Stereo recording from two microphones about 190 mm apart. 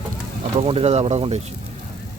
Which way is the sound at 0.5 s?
30° right (ahead or behind).